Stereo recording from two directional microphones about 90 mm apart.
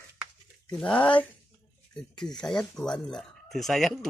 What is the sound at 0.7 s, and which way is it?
Speech, 10° left (ahead or behind).